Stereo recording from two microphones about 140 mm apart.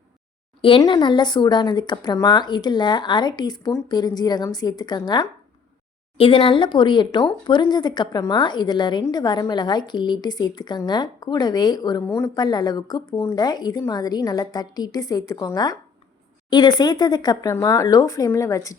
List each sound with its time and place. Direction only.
0.8 s a woman's voice: 30° left (ahead or behind)
12.0 s speech: 20° left (ahead or behind)
12.4 s speech: 30° left (ahead or behind)